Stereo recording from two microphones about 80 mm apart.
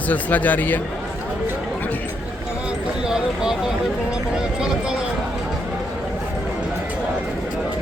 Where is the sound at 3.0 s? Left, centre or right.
Centre.